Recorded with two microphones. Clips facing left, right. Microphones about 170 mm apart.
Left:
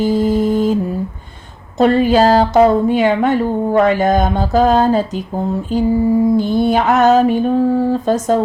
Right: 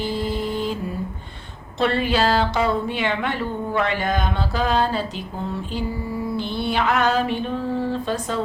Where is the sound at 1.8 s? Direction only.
40° left (ahead or behind).